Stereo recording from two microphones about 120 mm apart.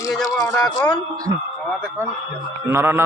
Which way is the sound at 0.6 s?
40° left (ahead or behind).